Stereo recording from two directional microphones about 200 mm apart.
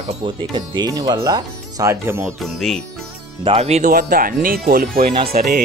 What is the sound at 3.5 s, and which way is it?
Speech, 30° right (ahead or behind).